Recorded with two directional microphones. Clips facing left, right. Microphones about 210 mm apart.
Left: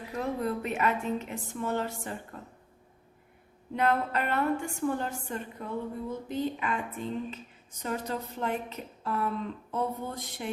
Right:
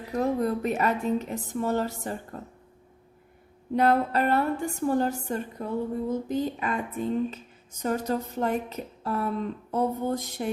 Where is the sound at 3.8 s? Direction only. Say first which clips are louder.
Right 5 dB; 35° right (ahead or behind).